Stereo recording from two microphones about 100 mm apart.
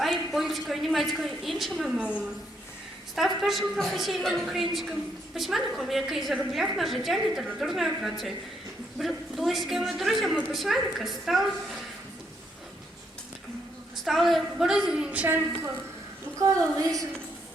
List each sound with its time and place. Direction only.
0.0 s a woman's voice: centre (ahead or behind)
14.0 s a woman's voice: centre (ahead or behind)